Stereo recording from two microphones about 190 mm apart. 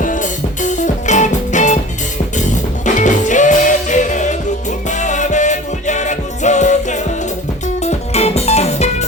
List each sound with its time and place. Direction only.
0.0 s music: 45° left (ahead or behind)
2.8 s music: 40° left (ahead or behind)